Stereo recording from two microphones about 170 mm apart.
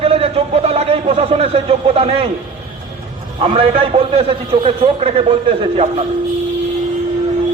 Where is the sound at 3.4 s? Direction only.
35° right (ahead or behind).